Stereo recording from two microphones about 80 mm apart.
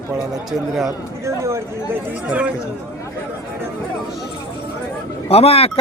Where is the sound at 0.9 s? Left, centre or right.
Right.